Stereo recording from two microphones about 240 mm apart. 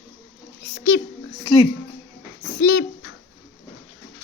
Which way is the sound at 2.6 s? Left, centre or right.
Left.